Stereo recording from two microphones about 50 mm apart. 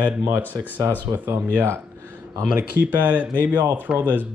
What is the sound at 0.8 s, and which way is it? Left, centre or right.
Speech, right.